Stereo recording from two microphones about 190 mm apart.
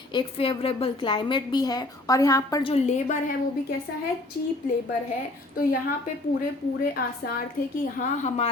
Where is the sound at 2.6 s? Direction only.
35° left (ahead or behind).